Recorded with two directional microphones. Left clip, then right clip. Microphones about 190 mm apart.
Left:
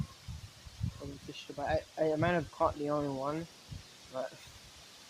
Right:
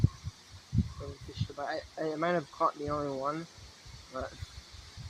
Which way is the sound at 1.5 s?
25° left (ahead or behind).